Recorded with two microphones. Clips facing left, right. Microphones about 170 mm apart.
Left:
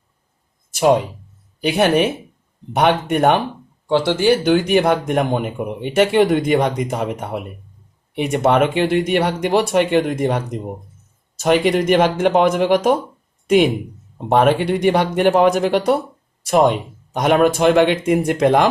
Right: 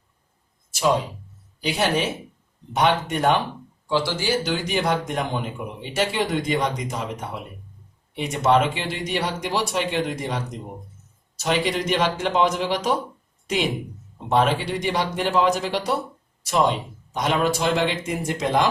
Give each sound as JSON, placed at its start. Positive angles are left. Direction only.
{"t": 1.6, "sound": "speech", "side_deg": 55}
{"t": 14.3, "sound": "speech", "side_deg": 60}